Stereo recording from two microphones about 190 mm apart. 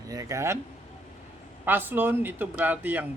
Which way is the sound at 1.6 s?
10° right (ahead or behind).